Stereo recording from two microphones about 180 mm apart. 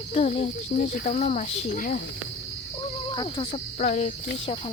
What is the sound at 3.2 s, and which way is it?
Cricket, 30° left (ahead or behind).